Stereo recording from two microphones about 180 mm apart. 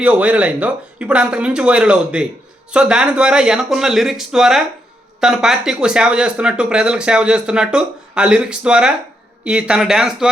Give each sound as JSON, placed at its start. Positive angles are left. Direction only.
{"t": 0.0, "sound": "speech", "side_deg": -5}